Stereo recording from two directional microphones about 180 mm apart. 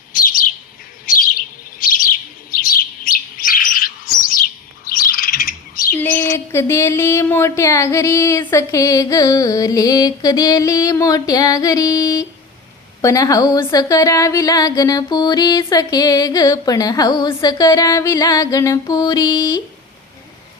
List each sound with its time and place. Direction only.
0.1 s chirp: 50° left (ahead or behind)
1.0 s bird: 50° left (ahead or behind)
6.0 s a sound: 10° left (ahead or behind)
6.3 s a woman's voice: 15° left (ahead or behind)